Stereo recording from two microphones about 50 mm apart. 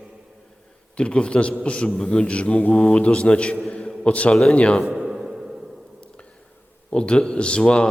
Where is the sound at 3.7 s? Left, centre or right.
Left.